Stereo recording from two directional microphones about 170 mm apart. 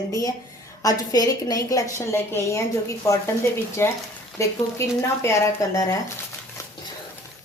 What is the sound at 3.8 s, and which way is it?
A woman's voice, 15° left (ahead or behind).